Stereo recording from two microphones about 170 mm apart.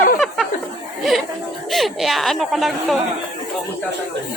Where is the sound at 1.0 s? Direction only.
Centre (ahead or behind).